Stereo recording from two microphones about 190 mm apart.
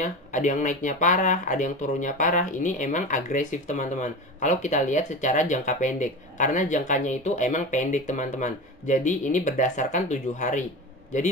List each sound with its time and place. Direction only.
0.0 s speech: 40° left (ahead or behind)